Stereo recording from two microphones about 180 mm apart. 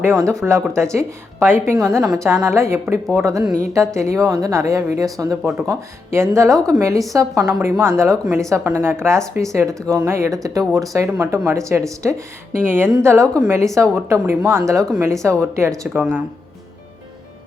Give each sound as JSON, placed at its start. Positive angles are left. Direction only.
{"t": 0.0, "sound": "speech", "side_deg": -15}
{"t": 16.0, "sound": "speech", "side_deg": -5}